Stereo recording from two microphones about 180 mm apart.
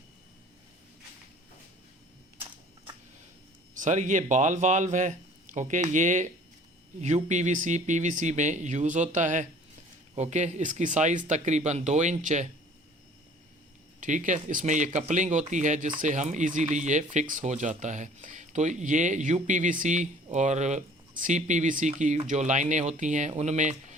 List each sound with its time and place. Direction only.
3.8 s speech: 45° right (ahead or behind)
14.0 s speech: 45° right (ahead or behind)